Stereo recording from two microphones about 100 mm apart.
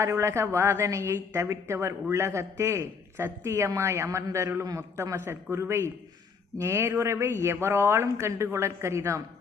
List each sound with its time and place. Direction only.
0.0 s a woman's voice: 30° right (ahead or behind)